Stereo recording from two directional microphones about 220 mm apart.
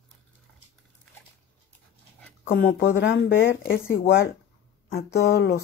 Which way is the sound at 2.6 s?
55° left (ahead or behind).